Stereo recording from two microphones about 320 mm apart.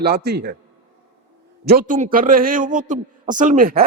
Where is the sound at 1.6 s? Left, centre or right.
Right.